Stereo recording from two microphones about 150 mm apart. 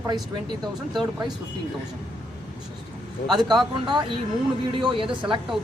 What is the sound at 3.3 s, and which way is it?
Speech, 30° right (ahead or behind).